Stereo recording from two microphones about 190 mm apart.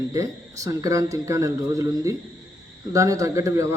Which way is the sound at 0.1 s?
15° right (ahead or behind).